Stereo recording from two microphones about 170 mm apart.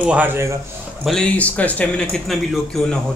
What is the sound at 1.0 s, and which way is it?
Speech, 5° left (ahead or behind).